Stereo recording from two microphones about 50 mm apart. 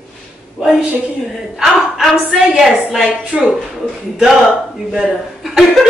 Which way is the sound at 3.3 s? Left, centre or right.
Centre.